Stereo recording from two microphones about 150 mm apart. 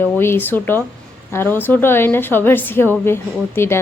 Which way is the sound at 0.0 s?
15° left (ahead or behind).